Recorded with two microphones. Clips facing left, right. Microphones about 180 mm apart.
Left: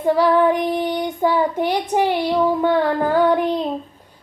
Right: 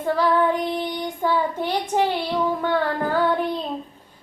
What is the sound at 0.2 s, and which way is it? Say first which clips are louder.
Child singing: left 3 dB; 15° left (ahead or behind).